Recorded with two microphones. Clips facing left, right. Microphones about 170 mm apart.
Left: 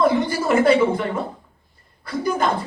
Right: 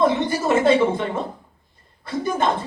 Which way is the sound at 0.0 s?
25° right (ahead or behind).